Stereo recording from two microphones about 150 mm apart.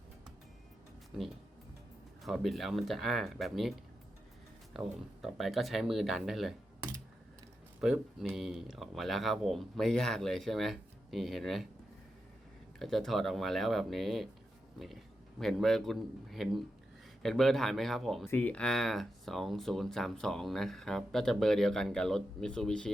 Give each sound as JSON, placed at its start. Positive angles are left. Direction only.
{"t": 1.1, "sound": "speech", "side_deg": 0}
{"t": 7.8, "sound": "speech", "side_deg": -5}
{"t": 12.8, "sound": "speech", "side_deg": 0}
{"t": 15.4, "sound": "speech", "side_deg": 0}